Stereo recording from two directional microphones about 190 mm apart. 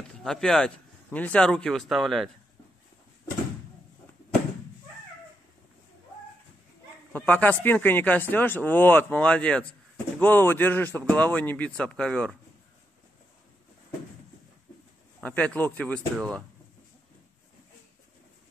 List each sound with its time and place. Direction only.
0.1 s speech: centre (ahead or behind)
7.1 s speech: 10° left (ahead or behind)
15.1 s speech: 5° left (ahead or behind)